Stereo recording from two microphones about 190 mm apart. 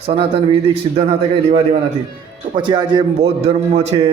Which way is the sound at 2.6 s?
25° right (ahead or behind).